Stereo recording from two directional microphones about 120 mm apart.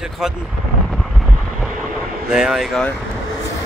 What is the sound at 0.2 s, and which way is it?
Speech, 5° right (ahead or behind).